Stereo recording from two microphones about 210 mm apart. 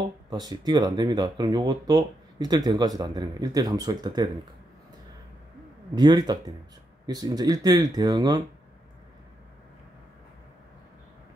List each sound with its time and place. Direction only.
0.3 s speech: 20° right (ahead or behind)
5.9 s speech: 20° right (ahead or behind)